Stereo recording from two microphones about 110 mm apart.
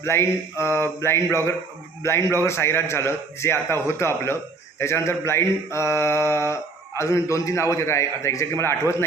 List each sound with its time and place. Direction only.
0.0 s speech: 25° left (ahead or behind)